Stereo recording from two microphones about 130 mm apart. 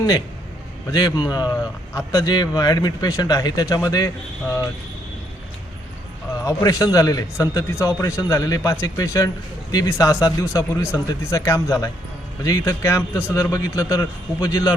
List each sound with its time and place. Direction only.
0.9 s a man's voice: 25° left (ahead or behind)
6.4 s a man's voice: 25° left (ahead or behind)